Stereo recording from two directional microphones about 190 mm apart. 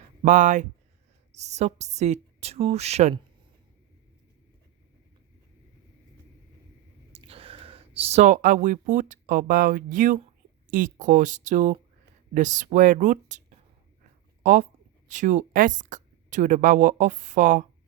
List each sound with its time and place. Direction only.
0.2 s a woman's voice: 40° right (ahead or behind)
7.1 s a woman's voice: 30° right (ahead or behind)
14.4 s a woman's voice: 45° right (ahead or behind)